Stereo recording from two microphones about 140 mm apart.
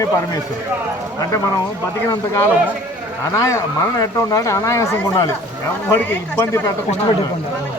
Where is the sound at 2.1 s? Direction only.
20° left (ahead or behind).